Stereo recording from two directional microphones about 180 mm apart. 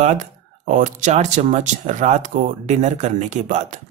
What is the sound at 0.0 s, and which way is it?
Speech, 45° right (ahead or behind).